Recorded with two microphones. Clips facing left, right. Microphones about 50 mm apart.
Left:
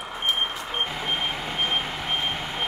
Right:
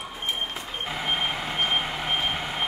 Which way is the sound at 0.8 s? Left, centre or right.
Centre.